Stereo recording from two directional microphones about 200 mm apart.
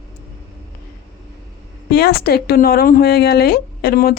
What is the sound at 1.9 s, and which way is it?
Speech, 50° left (ahead or behind).